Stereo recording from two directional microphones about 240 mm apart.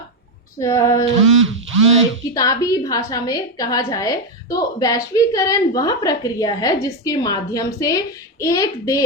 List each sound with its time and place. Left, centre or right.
0.6 s a woman's voice: centre
1.4 s a sound: right
2.3 s a woman's voice: centre